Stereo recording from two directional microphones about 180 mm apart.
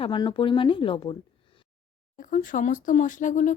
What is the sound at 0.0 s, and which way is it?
Speech, 25° left (ahead or behind).